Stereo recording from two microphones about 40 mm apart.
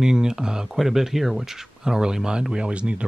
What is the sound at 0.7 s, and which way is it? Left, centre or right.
Speech, centre.